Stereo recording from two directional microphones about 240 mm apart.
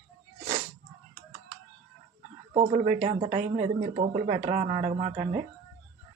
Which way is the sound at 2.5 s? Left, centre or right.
Right.